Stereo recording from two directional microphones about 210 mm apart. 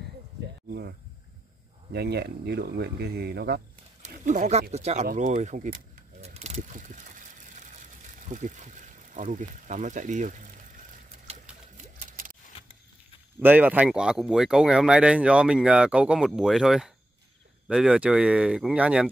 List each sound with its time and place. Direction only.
1.9 s speech: 50° right (ahead or behind)
4.0 s a sound: 35° right (ahead or behind)
4.7 s speech: 30° right (ahead or behind)
6.2 s boat: 30° right (ahead or behind)
8.3 s speech: 35° right (ahead or behind)
11.7 s a sound: 40° right (ahead or behind)
13.4 s speech: 10° right (ahead or behind)